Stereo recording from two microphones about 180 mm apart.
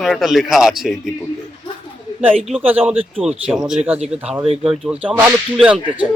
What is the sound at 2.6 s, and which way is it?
A man's voice, 10° right (ahead or behind).